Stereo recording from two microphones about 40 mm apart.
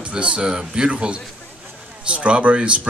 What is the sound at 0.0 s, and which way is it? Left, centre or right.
Speech, right.